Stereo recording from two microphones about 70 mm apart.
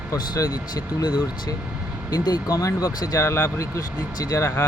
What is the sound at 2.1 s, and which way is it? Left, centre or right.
Speech, left.